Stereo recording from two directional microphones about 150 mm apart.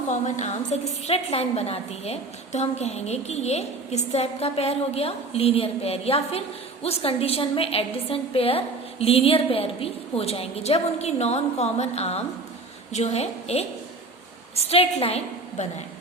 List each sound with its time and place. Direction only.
0.1 s a woman's voice: 50° left (ahead or behind)